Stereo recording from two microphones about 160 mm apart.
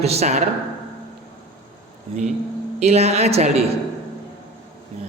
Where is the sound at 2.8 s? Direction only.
45° right (ahead or behind).